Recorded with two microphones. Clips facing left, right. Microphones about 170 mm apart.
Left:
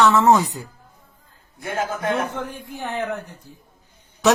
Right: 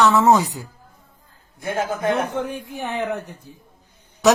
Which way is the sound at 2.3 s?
20° right (ahead or behind).